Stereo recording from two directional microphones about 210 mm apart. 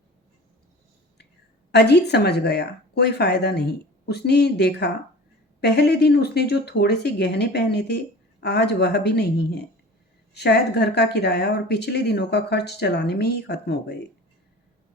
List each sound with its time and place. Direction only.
1.7 s speech: 50° left (ahead or behind)